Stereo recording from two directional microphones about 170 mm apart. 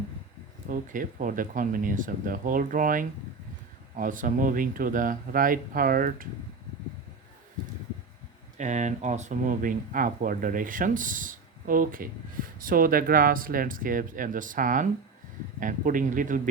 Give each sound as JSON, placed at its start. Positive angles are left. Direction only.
{"t": 0.7, "sound": "speech", "side_deg": -55}
{"t": 8.5, "sound": "speech", "side_deg": -45}